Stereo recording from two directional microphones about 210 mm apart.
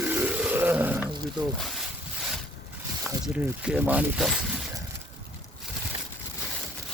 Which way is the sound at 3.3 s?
5° right (ahead or behind).